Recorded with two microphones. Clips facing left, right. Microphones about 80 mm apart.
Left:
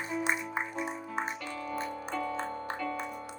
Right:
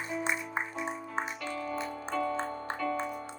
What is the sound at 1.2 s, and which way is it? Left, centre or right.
Music, right.